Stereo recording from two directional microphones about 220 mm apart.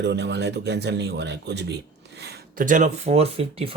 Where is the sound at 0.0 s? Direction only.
50° right (ahead or behind).